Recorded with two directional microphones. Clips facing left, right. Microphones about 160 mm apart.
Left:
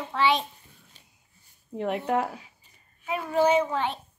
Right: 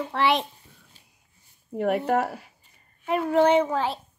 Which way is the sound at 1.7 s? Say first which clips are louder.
Right 4 dB; 10° right (ahead or behind).